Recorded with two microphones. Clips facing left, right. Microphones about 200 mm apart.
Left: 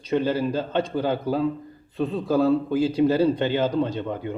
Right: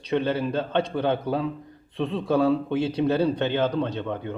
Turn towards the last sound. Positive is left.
turn(degrees=10)  # may be behind; listen again after turning